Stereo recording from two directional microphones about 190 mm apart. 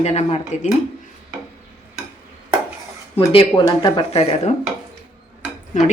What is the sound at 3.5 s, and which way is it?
Speech, 20° left (ahead or behind).